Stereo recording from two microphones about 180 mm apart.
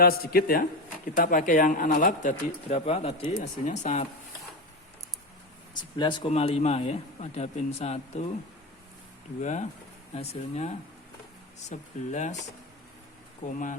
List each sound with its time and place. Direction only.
0.0 s speech: 55° left (ahead or behind)
2.6 s a man's voice: 35° left (ahead or behind)
5.7 s a man's voice: 25° left (ahead or behind)
9.4 s a man's voice: 40° left (ahead or behind)
11.7 s a man's voice: 40° left (ahead or behind)
13.4 s speech: 45° left (ahead or behind)